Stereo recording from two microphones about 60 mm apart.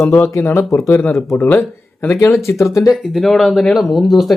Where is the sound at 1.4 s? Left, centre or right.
Left.